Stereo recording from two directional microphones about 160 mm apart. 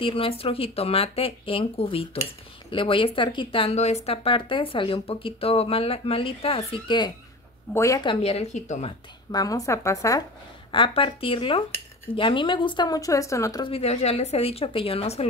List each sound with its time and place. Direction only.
0.0 s speech: 35° left (ahead or behind)
7.7 s speech: 20° left (ahead or behind)
8.1 s speech: 40° left (ahead or behind)
9.3 s speech: 20° left (ahead or behind)
10.7 s speech: 30° left (ahead or behind)
13.7 s speech: 40° left (ahead or behind)